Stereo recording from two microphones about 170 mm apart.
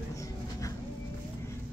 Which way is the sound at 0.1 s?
20° left (ahead or behind).